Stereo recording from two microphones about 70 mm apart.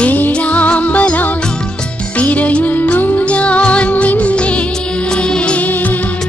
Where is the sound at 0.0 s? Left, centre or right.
Left.